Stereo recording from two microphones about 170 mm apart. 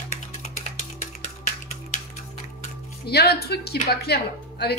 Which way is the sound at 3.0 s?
70° left (ahead or behind).